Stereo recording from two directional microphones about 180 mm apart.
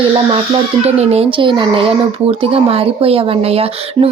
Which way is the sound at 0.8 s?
35° right (ahead or behind).